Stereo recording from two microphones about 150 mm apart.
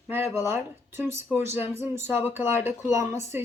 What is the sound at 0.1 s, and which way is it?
Speech, 15° right (ahead or behind).